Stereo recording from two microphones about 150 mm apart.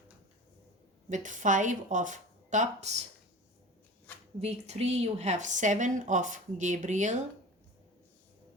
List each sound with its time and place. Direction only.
1.1 s a woman's voice: 55° right (ahead or behind)
4.4 s a woman's voice: 45° right (ahead or behind)